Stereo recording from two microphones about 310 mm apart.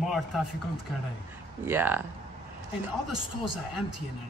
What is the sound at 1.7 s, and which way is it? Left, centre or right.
Speech, centre.